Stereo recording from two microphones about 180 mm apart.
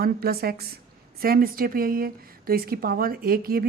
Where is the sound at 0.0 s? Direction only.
55° right (ahead or behind).